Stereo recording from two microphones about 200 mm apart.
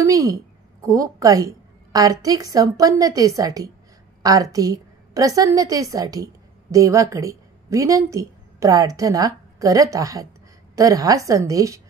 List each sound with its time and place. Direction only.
0.0 s a woman's voice: 15° right (ahead or behind)